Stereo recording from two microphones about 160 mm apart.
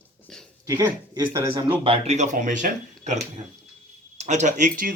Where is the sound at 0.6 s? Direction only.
20° right (ahead or behind).